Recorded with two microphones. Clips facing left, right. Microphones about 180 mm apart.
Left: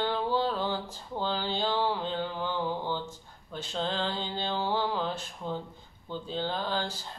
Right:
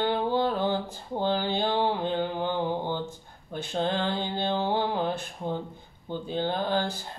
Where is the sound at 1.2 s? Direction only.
55° right (ahead or behind).